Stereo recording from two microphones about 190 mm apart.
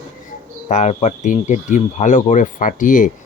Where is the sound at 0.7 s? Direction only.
40° left (ahead or behind).